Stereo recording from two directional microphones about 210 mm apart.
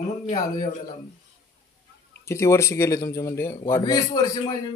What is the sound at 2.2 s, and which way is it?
Speech, 15° left (ahead or behind).